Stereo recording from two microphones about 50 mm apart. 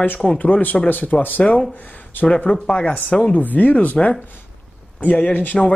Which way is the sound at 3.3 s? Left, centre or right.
Left.